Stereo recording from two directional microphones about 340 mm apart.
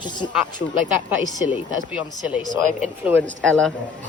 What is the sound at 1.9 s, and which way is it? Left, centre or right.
Speech, centre.